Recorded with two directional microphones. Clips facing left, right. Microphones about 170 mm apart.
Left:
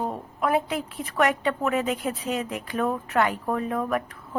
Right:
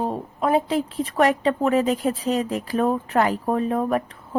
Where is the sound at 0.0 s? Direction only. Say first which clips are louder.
Right 3 dB; 30° right (ahead or behind).